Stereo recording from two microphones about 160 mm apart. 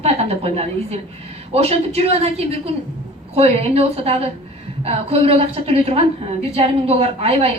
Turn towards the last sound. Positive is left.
turn(degrees=-40)  # may be behind; listen again after turning